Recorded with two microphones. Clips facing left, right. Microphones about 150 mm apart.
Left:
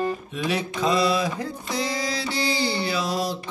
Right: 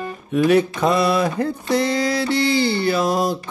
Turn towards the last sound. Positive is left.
turn(degrees=-50)  # may be behind; listen again after turning